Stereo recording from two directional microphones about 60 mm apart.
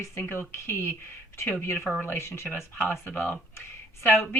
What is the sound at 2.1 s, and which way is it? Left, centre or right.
Speech, left.